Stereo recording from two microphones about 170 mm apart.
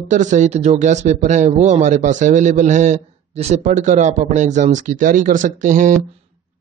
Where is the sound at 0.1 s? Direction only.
45° right (ahead or behind).